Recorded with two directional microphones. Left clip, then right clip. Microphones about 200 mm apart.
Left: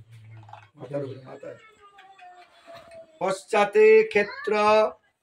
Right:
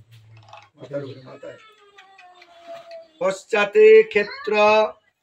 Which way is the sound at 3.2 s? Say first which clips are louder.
Right 2 dB; 50° left (ahead or behind).